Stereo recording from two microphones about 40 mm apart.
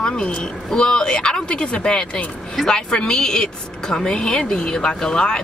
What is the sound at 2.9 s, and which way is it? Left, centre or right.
A woman's voice, left.